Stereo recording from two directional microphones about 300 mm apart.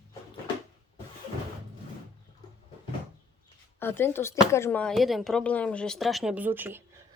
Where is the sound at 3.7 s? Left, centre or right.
Centre.